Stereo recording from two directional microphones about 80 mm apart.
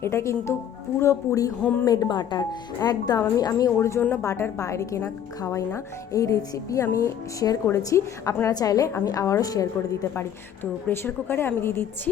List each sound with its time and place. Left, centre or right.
0.0 s speech: left
1.9 s speech: left
3.2 s a woman's voice: left
10.2 s a woman's voice: left